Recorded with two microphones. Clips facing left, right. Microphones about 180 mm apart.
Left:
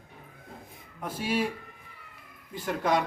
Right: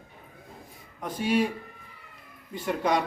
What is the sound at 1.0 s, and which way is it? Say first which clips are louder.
Speech: right 4 dB; 5° left (ahead or behind).